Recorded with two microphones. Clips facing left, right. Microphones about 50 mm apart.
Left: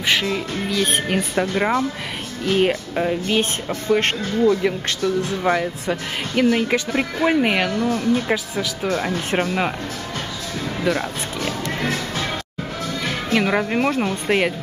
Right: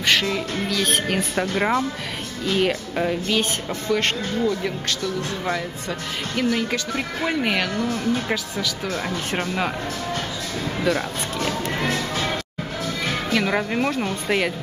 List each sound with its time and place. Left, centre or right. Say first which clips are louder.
0.0 s speech: even; centre
2.4 s speech: left 3 dB; left
2.7 s speech: left 2 dB; centre
3.9 s speech: left 3 dB; left; by 11.5 s centre
13.3 s speech: left 4 dB; centre